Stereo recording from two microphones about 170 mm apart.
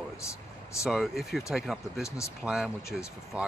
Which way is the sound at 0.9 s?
Centre (ahead or behind).